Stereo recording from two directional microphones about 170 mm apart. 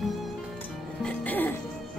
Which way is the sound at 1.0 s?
10° left (ahead or behind).